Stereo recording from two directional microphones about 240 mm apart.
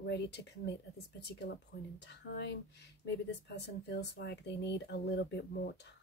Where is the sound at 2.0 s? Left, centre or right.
Left.